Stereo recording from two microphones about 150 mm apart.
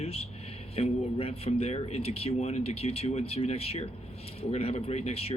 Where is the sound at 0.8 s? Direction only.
40° left (ahead or behind).